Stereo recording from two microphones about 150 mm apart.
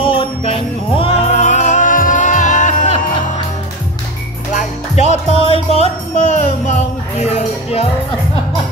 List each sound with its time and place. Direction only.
0.0 s music: 35° left (ahead or behind); by 3.0 s 55° left (ahead or behind)
4.6 s music: 50° left (ahead or behind)